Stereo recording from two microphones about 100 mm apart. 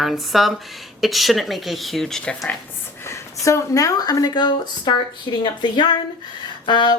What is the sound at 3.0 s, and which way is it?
Speech, 30° left (ahead or behind).